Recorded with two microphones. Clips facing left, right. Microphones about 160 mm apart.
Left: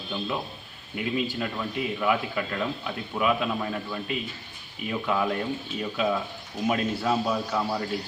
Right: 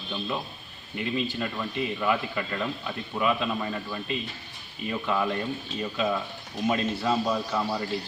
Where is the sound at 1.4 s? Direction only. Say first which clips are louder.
Even; 5° left (ahead or behind).